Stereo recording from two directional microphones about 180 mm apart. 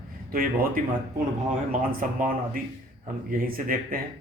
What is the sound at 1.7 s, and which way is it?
Speech, 50° right (ahead or behind).